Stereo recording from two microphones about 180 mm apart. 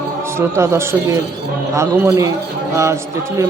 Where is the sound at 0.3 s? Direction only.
15° right (ahead or behind).